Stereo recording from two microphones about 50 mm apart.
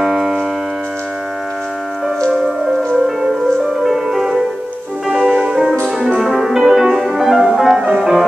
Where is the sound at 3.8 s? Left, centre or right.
Centre.